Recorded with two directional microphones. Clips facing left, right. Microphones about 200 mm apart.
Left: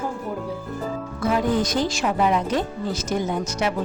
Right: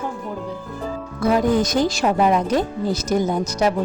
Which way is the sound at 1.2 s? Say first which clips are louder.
Right 4 dB; 40° right (ahead or behind).